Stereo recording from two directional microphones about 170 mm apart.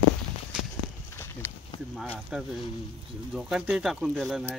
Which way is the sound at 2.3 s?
5° right (ahead or behind).